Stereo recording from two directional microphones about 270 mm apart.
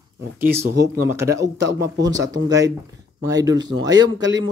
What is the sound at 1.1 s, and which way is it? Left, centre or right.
Speech, centre.